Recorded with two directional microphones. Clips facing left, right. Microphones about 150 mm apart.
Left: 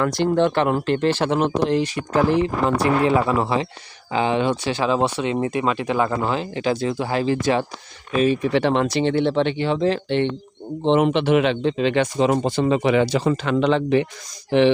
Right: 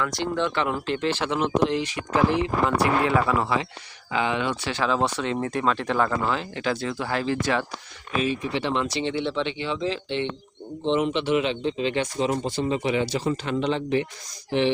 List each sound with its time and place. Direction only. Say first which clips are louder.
0.0 s speech: left 7 dB; 55° left (ahead or behind)
2.7 s speech: left 4 dB; 25° left (ahead or behind)
4.7 s speech: left 4 dB; 15° left (ahead or behind)
8.2 s speech: left 8 dB; 55° left (ahead or behind); by 14.1 s 85° left